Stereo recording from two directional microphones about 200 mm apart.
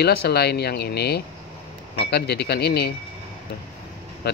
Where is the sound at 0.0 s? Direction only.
50° left (ahead or behind).